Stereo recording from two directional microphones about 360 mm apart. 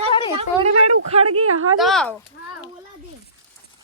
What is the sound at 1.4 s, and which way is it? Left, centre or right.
Speech, right.